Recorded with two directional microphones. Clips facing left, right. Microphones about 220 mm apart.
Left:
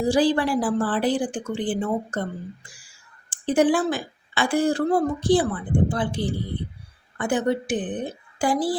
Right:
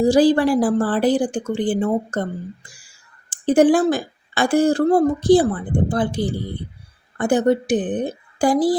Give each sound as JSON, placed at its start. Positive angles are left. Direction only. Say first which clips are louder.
{"t": 0.1, "sound": "a woman's voice", "louder": "right 3 dB", "side_deg": -40}
{"t": 3.2, "sound": "a woman's voice", "louder": "right 5 dB", "side_deg": -45}